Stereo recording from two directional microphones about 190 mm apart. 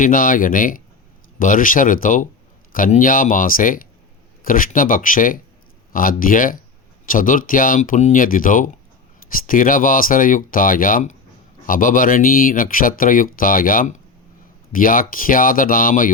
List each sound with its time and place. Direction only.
0.0 s speech: 45° left (ahead or behind)